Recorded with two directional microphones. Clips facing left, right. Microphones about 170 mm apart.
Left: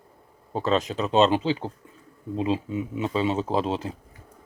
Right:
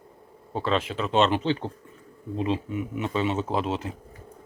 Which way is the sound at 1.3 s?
10° left (ahead or behind).